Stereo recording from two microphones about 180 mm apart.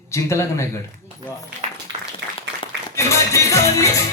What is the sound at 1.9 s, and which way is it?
Applause, 90° right.